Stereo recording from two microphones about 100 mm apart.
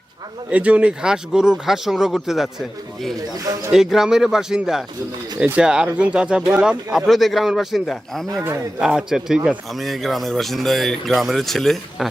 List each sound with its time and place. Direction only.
0.5 s speech: 15° right (ahead or behind); by 8.3 s 5° left (ahead or behind)
8.3 s speech: 25° right (ahead or behind)
8.8 s speech: 5° right (ahead or behind)